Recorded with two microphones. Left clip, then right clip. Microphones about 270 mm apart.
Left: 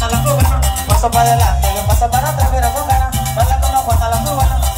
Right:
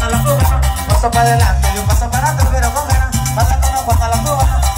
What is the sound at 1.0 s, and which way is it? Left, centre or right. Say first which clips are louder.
Music: even; left.